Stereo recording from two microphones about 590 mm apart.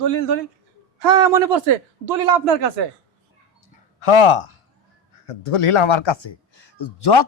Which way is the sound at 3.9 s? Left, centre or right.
Left.